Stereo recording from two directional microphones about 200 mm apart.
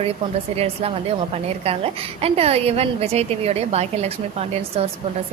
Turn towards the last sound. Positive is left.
turn(degrees=-30)  # may be behind; listen again after turning